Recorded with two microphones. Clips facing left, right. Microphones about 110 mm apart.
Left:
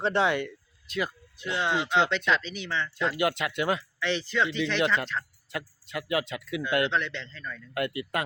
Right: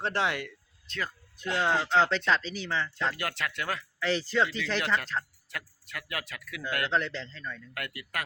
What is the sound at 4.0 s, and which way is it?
Speech, 40° right (ahead or behind).